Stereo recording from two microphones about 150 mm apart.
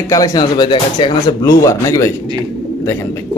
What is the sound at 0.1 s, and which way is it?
Speech, 25° left (ahead or behind).